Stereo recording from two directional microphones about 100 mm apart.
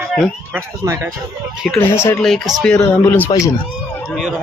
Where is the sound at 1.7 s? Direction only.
25° left (ahead or behind).